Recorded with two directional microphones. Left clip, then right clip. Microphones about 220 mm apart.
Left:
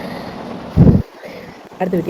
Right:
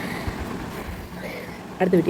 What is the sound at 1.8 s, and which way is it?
Speech, 15° right (ahead or behind).